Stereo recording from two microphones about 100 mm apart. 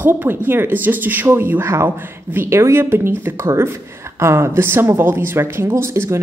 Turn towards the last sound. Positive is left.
turn(degrees=-25)  # may be behind; listen again after turning